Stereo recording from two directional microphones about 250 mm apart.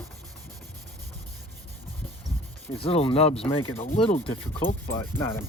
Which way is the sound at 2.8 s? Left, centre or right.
Left.